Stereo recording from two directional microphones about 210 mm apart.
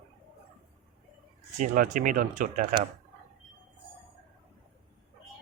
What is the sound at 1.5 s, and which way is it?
Speech, 35° right (ahead or behind).